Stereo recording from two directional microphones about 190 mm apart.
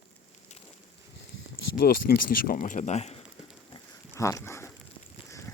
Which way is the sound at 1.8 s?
55° left (ahead or behind).